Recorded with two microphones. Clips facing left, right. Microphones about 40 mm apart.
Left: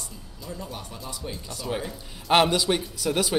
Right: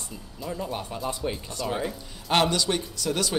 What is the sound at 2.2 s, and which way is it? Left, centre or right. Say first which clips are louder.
Speech: left 3 dB; centre.